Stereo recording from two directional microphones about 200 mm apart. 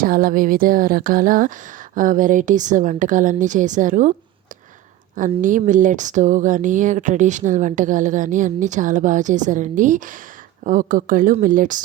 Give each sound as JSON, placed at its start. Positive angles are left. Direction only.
{"t": 0.0, "sound": "a sound", "side_deg": -45}
{"t": 2.0, "sound": "speech", "side_deg": -40}
{"t": 5.4, "sound": "speech", "side_deg": -40}